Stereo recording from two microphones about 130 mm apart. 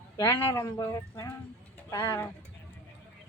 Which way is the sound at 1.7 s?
15° left (ahead or behind).